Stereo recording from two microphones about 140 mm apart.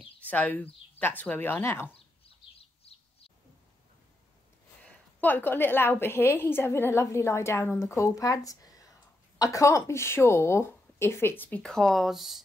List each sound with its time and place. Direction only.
0.3 s a woman's voice: 10° left (ahead or behind)
2.8 s bird: 45° left (ahead or behind)
4.8 s a woman's voice: 10° left (ahead or behind)